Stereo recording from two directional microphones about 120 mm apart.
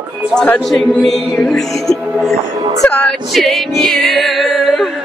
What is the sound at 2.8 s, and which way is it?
Music, 5° left (ahead or behind).